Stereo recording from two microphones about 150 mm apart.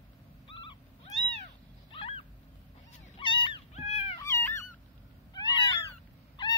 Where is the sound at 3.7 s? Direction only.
45° left (ahead or behind).